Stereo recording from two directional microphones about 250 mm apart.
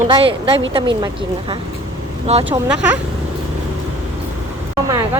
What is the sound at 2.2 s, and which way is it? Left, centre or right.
Speech, right.